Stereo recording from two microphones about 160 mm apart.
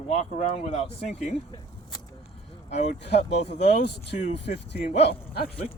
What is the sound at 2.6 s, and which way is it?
Speech, 45° left (ahead or behind).